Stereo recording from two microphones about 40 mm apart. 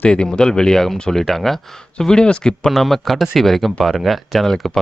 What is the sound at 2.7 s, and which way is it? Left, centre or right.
Speech, centre.